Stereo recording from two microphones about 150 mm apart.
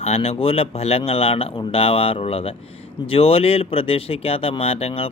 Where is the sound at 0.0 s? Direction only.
40° left (ahead or behind).